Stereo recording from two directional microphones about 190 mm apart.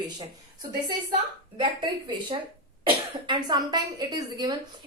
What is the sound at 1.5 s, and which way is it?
A woman's voice, 25° right (ahead or behind).